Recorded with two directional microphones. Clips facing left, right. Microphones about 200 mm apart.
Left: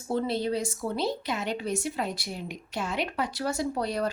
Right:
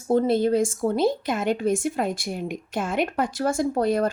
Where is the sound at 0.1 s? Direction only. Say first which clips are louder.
Right 8 dB; 50° right (ahead or behind).